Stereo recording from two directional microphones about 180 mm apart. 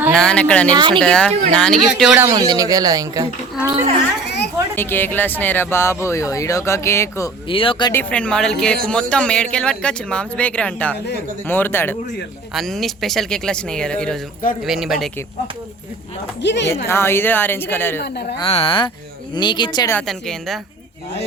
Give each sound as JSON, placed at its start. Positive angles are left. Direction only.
{"t": 0.1, "sound": "speech", "side_deg": 5}
{"t": 0.7, "sound": "speech", "side_deg": -25}
{"t": 0.9, "sound": "speech", "side_deg": 5}
{"t": 2.2, "sound": "speech", "side_deg": -20}
{"t": 4.3, "sound": "speech", "side_deg": 70}
{"t": 4.7, "sound": "speech", "side_deg": 10}
{"t": 7.4, "sound": "speech", "side_deg": 30}
{"t": 7.9, "sound": "speech", "side_deg": 5}
{"t": 16.4, "sound": "a woman's voice", "side_deg": 75}
{"t": 16.8, "sound": "speech", "side_deg": 15}
{"t": 18.0, "sound": "speech", "side_deg": 65}
{"t": 18.3, "sound": "speech", "side_deg": 30}
{"t": 19.9, "sound": "speech", "side_deg": 5}